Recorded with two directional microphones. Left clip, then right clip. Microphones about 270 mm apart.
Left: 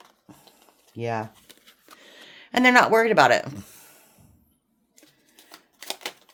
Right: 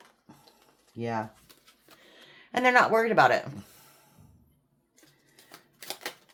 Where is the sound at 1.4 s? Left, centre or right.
Centre.